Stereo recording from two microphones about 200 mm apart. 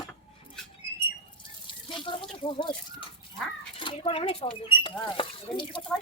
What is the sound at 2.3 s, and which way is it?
Speech, 25° left (ahead or behind).